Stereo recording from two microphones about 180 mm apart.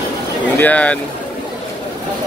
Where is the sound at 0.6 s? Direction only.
10° left (ahead or behind).